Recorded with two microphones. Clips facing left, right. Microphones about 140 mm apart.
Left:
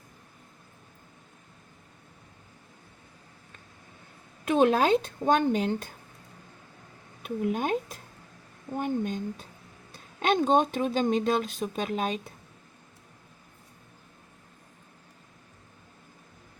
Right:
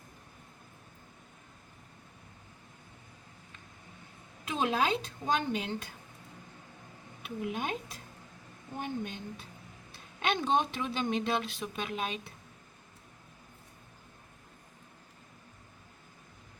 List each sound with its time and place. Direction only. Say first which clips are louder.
4.4 s speech: left 8 dB; 50° left (ahead or behind)
7.2 s speech: left 7 dB; 45° left (ahead or behind)